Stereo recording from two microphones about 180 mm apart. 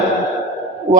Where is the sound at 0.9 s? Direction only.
25° right (ahead or behind).